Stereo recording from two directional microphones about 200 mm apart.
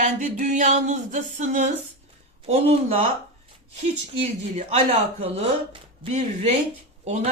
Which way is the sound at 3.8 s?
35° right (ahead or behind).